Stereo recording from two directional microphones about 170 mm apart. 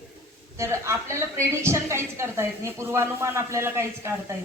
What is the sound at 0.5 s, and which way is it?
A woman's voice, 15° right (ahead or behind).